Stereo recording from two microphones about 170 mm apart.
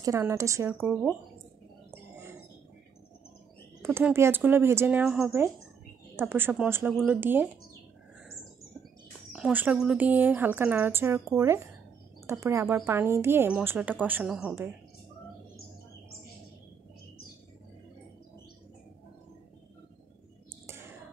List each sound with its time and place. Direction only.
0.0 s a woman's voice: 15° right (ahead or behind)
3.8 s a woman's voice: 15° right (ahead or behind)
9.3 s a woman's voice: 10° right (ahead or behind)
20.6 s whispering: 15° right (ahead or behind)